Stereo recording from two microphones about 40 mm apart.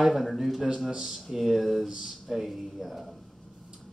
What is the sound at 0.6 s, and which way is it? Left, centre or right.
Speech, centre.